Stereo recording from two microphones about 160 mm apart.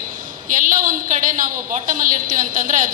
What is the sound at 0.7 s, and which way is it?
A man's voice, 55° right (ahead or behind).